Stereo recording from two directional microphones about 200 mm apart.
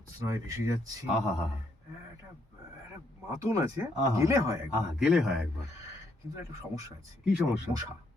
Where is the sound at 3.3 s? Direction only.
15° right (ahead or behind).